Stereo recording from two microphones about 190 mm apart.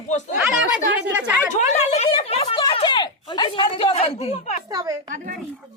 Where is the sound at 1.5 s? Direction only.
40° left (ahead or behind).